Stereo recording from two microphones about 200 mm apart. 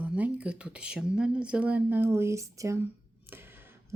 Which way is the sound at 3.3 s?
10° right (ahead or behind).